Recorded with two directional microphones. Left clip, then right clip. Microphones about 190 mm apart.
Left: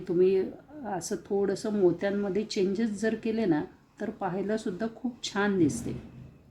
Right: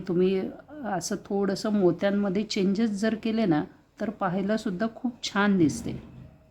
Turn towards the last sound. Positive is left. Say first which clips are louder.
# right 2 dB
turn(degrees=-35)  # may be behind; listen again after turning